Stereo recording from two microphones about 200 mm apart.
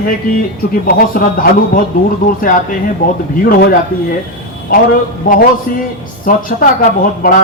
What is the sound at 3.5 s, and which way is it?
Speech, 45° left (ahead or behind).